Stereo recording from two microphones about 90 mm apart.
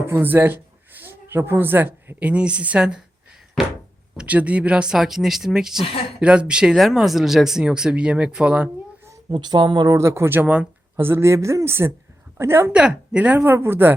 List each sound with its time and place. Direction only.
0.1 s a woman's voice: 20° right (ahead or behind)
4.2 s speech: 15° right (ahead or behind)
9.3 s speech: 55° right (ahead or behind)
10.0 s a woman's voice: 30° right (ahead or behind); by 10.7 s 15° right (ahead or behind)
10.9 s a woman's voice: 30° right (ahead or behind)
12.7 s a woman's voice: 15° right (ahead or behind)